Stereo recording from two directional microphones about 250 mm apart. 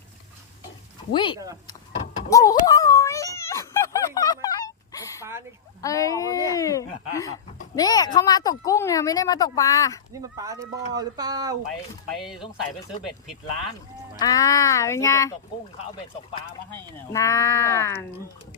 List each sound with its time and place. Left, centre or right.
1.1 s speech: centre
2.3 s a sound: centre
5.8 s speech: centre
10.2 s speech: centre
12.1 s speech: centre
14.2 s speech: centre
16.7 s speech: centre